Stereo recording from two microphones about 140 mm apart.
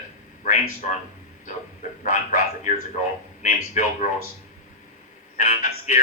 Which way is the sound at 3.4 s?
60° left (ahead or behind).